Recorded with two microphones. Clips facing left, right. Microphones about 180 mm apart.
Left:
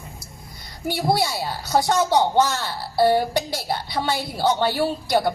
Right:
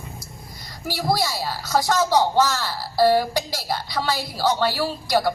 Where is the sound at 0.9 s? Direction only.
25° left (ahead or behind).